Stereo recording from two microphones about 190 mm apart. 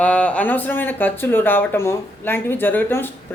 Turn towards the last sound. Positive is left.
turn(degrees=10)  # may be behind; listen again after turning